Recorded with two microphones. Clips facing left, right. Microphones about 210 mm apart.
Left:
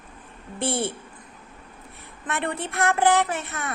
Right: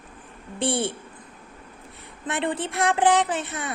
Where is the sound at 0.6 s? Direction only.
15° right (ahead or behind).